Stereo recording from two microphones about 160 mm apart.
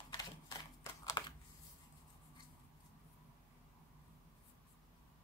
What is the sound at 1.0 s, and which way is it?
Computer keyboard, 20° left (ahead or behind).